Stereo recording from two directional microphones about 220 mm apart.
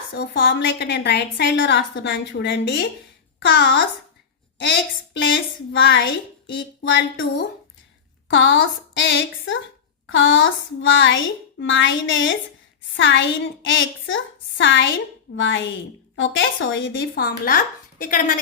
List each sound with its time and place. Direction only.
0.1 s a woman's voice: 45° left (ahead or behind)
5.7 s a woman's voice: 55° left (ahead or behind); by 18.3 s 40° left (ahead or behind)